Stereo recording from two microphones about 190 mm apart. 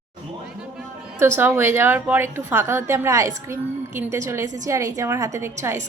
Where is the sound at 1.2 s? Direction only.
10° right (ahead or behind).